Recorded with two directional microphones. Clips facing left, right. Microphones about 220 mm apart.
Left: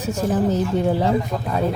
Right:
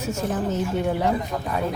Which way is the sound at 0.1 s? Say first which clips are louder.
Left 6 dB; 35° left (ahead or behind).